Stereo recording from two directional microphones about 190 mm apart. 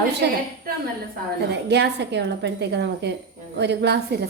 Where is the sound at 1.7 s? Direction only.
65° right (ahead or behind).